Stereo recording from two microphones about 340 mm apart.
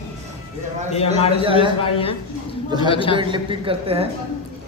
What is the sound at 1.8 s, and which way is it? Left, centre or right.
A woman's voice, centre.